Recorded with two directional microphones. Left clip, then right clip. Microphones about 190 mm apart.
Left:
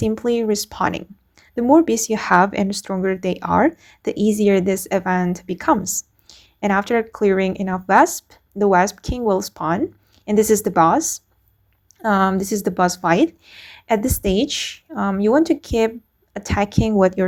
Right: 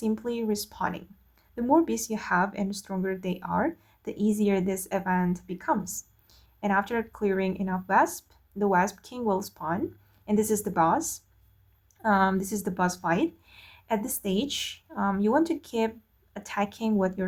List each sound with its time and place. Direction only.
0.0 s speech: 35° left (ahead or behind)